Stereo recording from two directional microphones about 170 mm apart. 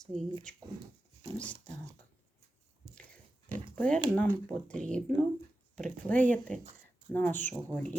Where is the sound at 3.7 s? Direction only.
5° left (ahead or behind).